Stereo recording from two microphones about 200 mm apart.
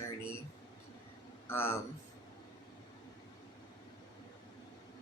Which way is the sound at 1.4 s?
10° left (ahead or behind).